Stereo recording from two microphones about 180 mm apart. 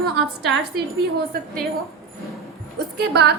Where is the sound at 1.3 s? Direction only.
50° right (ahead or behind).